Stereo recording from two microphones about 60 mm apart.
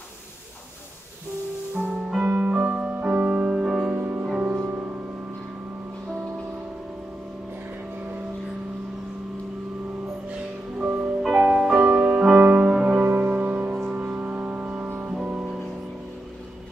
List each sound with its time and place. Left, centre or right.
1.9 s music: centre
2.2 s music: right
2.5 s music: centre
10.8 s music: right
11.6 s music: centre
12.4 s music: right
13.0 s music: right; by 15.6 s centre